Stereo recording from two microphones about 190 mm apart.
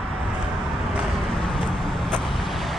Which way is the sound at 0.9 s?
Centre (ahead or behind).